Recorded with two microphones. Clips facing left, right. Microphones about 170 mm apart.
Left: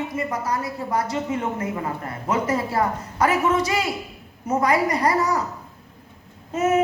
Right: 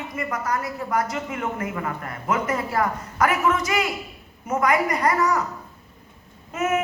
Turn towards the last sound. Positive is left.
turn(degrees=30)  # may be behind; listen again after turning